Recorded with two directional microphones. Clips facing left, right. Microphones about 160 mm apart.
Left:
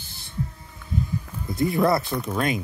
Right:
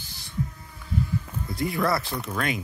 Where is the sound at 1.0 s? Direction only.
20° left (ahead or behind).